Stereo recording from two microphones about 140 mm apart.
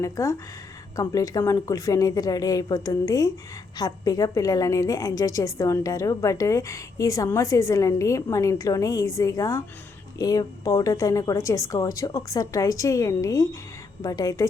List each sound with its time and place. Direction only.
0.0 s a woman's voice: 20° left (ahead or behind)